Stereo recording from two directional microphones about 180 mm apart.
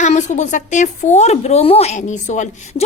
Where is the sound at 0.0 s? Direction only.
40° left (ahead or behind).